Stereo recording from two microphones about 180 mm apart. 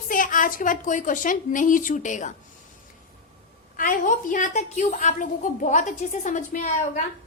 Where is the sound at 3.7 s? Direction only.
50° left (ahead or behind).